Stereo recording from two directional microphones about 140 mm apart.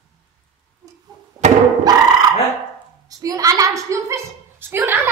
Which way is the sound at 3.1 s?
25° right (ahead or behind).